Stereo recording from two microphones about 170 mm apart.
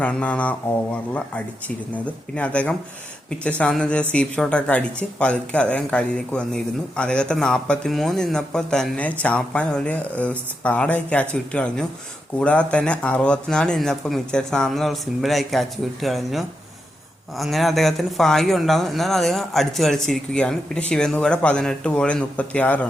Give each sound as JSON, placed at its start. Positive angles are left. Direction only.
{"t": 0.0, "sound": "speech", "side_deg": 10}